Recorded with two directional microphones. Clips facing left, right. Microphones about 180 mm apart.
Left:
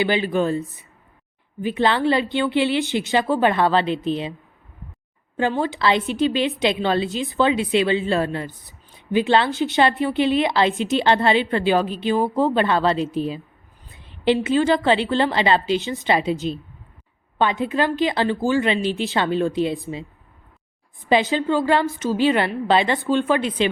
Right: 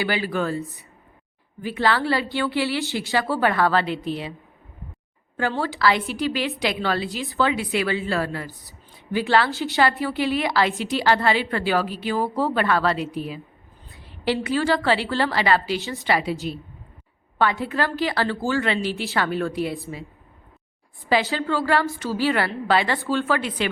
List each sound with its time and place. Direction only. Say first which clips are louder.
0.0 s a woman's voice: left 4 dB; 20° left (ahead or behind)
5.4 s a woman's voice: left 2 dB; 20° left (ahead or behind)
21.1 s a woman's voice: left 3 dB; 20° left (ahead or behind)